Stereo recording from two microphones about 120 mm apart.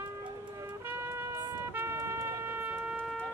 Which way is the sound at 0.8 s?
20° right (ahead or behind).